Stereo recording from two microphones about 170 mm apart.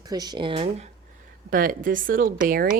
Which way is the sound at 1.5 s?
55° right (ahead or behind).